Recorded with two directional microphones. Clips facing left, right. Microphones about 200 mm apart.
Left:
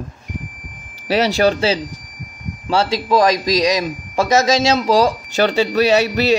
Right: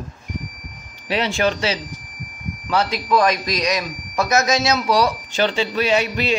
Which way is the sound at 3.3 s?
90° left.